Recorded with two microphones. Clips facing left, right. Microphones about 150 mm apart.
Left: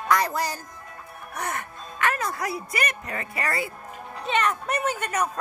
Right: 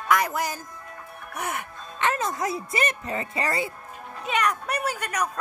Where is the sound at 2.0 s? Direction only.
20° right (ahead or behind).